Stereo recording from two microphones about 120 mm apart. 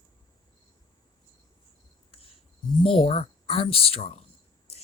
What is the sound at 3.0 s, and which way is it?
Speech, 55° left (ahead or behind).